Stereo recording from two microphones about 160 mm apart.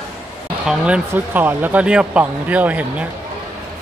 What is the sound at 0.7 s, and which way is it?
Speech, 5° right (ahead or behind).